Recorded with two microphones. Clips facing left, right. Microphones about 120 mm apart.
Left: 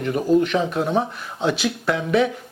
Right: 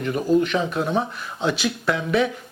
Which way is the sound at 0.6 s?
30° left (ahead or behind).